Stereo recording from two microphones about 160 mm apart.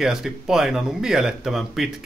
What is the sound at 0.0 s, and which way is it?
Speech, 5° right (ahead or behind).